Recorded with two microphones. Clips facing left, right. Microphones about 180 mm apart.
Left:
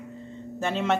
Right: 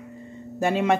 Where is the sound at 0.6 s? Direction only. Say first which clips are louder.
Right 4 dB; 10° right (ahead or behind).